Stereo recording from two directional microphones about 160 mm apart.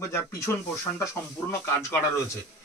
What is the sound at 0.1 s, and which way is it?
Speech, 20° left (ahead or behind).